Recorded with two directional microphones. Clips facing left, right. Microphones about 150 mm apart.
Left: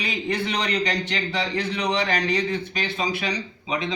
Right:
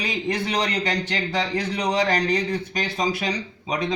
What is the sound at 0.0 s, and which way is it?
A man's voice, 40° right (ahead or behind).